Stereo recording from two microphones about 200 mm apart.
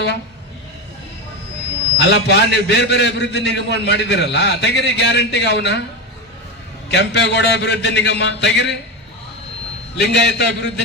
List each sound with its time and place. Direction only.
2.0 s a man's voice: 55° left (ahead or behind)
6.9 s a man's voice: 60° left (ahead or behind)
10.2 s a man's voice: 60° left (ahead or behind)